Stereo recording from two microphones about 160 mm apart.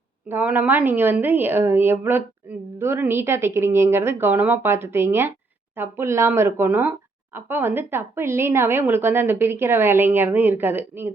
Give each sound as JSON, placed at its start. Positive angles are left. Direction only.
{"t": 0.3, "sound": "a woman's voice", "side_deg": -10}